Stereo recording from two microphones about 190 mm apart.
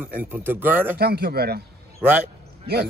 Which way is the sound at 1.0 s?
55° right (ahead or behind).